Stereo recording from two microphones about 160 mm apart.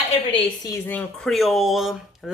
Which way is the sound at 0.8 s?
5° left (ahead or behind).